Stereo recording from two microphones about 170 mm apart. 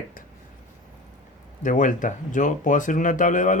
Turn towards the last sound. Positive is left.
turn(degrees=50)  # may be behind; listen again after turning